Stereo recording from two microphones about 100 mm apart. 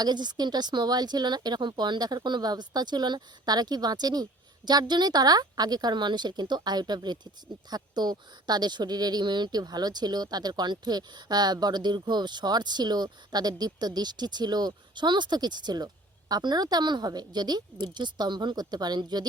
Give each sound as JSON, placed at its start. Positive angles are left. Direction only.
{"t": 0.0, "sound": "speech", "side_deg": -45}